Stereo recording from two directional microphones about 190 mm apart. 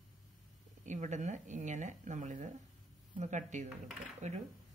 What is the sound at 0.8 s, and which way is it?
Speech, 40° right (ahead or behind).